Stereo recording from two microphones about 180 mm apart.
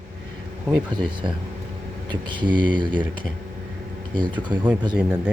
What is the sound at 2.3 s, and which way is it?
Speech, 25° right (ahead or behind).